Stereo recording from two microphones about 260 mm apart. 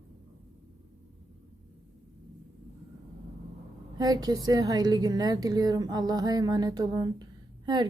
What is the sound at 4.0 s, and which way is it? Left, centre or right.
A woman's voice, centre.